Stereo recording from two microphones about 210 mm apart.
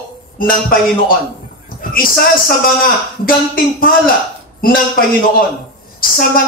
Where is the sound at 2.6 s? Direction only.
45° left (ahead or behind).